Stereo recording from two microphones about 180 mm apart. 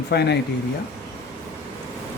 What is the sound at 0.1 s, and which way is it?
Speech, 65° left (ahead or behind).